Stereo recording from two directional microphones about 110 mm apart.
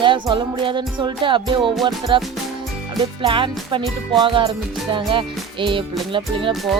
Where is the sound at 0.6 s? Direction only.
50° right (ahead or behind).